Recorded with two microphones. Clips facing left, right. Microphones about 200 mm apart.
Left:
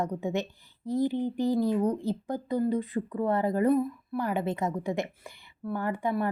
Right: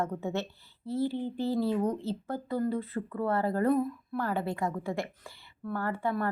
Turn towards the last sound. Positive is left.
turn(degrees=15)  # may be behind; listen again after turning